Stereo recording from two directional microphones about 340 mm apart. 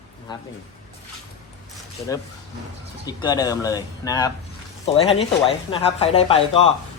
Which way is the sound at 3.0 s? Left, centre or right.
Centre.